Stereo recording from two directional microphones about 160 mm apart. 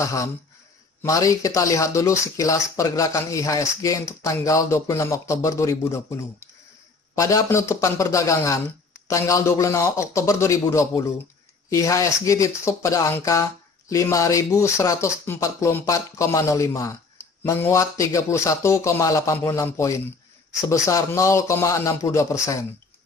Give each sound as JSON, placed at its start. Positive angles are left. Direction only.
{"t": 0.0, "sound": "speech", "side_deg": 20}